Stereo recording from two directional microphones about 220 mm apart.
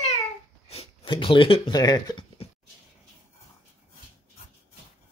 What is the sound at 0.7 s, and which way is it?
Speech, 25° left (ahead or behind).